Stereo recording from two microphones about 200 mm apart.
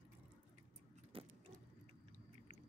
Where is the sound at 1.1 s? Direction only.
30° right (ahead or behind).